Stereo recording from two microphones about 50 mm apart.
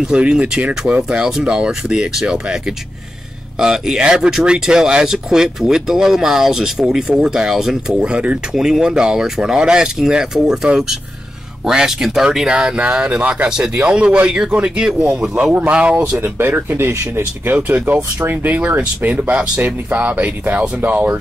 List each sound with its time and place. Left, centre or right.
0.1 s speech: right
8.1 s speech: right
8.5 s speech: centre
16.2 s speech: right